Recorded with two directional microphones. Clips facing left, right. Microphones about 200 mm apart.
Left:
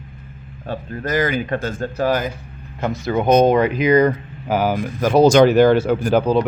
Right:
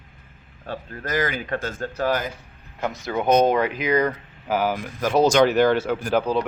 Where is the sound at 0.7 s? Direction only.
15° left (ahead or behind).